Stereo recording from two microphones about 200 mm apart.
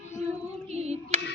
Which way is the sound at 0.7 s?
30° right (ahead or behind).